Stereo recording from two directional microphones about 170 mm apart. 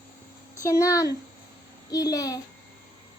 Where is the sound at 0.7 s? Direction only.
20° left (ahead or behind).